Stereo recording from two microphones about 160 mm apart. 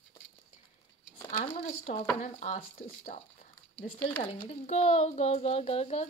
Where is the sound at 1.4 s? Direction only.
40° left (ahead or behind).